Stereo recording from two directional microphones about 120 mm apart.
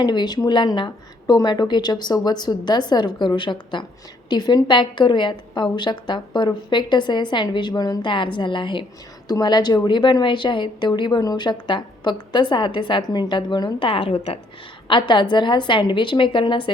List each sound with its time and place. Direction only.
0.0 s a woman's voice: 35° left (ahead or behind)